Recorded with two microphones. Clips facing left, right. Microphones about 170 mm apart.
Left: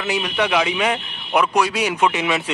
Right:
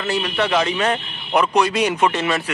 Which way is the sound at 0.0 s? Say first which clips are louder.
Even; 10° left (ahead or behind).